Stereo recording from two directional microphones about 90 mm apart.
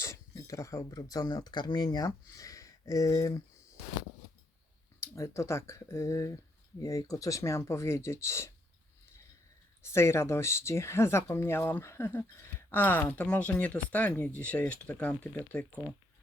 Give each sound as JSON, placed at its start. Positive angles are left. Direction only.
{"t": 0.0, "sound": "speech", "side_deg": 40}
{"t": 4.9, "sound": "speech", "side_deg": 30}
{"t": 9.8, "sound": "speech", "side_deg": 30}